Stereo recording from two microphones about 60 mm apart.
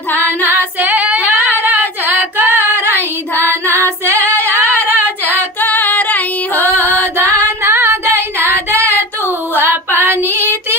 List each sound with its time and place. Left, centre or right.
0.2 s female singing: right
1.6 s singing: right
3.3 s female singing: right
4.7 s singing: right
5.4 s female singing: left
6.6 s music: right
7.2 s singing: right
8.7 s female singing: left
9.6 s female singing: right